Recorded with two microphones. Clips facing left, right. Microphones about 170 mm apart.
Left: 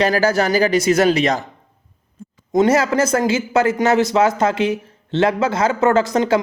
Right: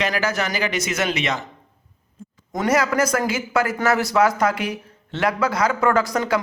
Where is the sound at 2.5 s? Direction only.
25° left (ahead or behind).